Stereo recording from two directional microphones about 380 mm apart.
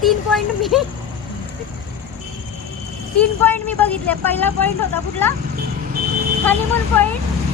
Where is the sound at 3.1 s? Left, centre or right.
Centre.